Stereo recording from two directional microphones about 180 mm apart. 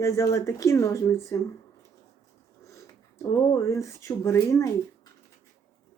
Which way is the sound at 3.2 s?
15° left (ahead or behind).